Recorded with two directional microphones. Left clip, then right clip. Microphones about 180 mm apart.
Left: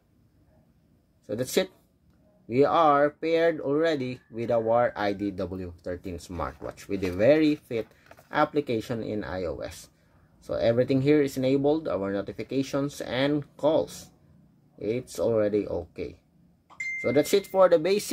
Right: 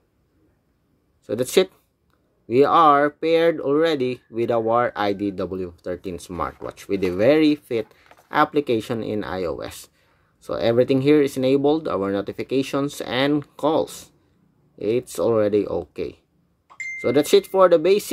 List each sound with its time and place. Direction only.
1.2 s speech: 35° right (ahead or behind)